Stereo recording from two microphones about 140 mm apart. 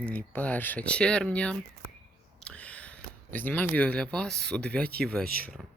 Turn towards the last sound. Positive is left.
turn(degrees=-90)